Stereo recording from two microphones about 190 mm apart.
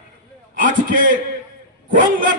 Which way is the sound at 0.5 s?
45° right (ahead or behind).